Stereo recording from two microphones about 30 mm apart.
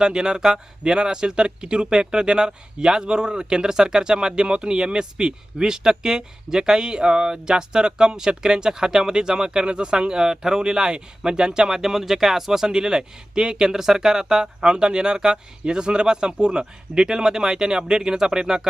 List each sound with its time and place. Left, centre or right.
0.0 s speech: right